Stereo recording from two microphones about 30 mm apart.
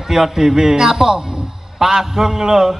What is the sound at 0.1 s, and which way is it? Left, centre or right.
A man's voice, centre.